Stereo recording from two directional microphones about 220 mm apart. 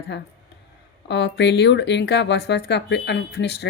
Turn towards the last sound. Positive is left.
turn(degrees=50)  # may be behind; listen again after turning